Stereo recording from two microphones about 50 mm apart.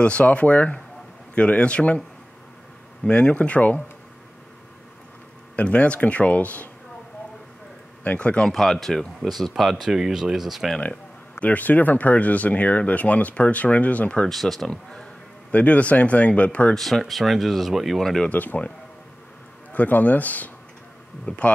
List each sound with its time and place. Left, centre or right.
0.0 s speech: left
3.1 s speech: left
5.6 s speech: left
8.0 s speech: left
8.5 s speech: centre
10.8 s speech: left
14.2 s speech: centre
14.7 s speech: centre
15.5 s speech: left
16.7 s speech: centre
18.3 s speech: left
19.7 s speech: left